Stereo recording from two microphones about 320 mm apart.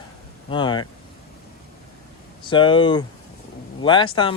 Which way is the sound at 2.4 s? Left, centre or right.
Centre.